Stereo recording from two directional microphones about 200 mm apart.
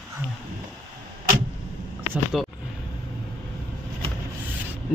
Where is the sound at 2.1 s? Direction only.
5° right (ahead or behind).